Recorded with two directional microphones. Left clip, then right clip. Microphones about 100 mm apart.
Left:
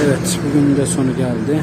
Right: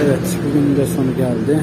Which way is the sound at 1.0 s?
30° left (ahead or behind).